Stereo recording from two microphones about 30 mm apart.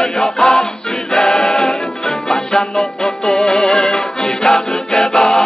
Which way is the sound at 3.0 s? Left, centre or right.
Centre.